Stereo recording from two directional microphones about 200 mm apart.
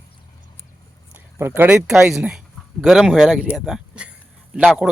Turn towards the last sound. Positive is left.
turn(degrees=-5)  # may be behind; listen again after turning